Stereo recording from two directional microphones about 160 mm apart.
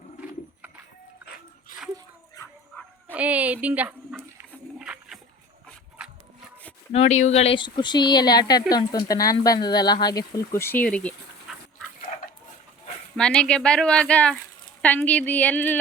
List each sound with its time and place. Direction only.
1.7 s dog: 55° left (ahead or behind)
3.1 s speech: 10° right (ahead or behind)
4.8 s a sound: 5° right (ahead or behind)
6.0 s wood: 5° right (ahead or behind)
6.9 s speech: 45° left (ahead or behind); by 11.5 s 5° left (ahead or behind)
13.1 s speech: 5° left (ahead or behind)